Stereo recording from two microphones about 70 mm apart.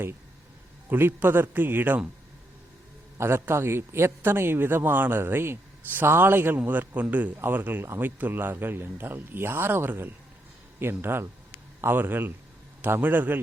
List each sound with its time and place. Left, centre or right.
0.9 s a man's voice: right
3.2 s a man's voice: right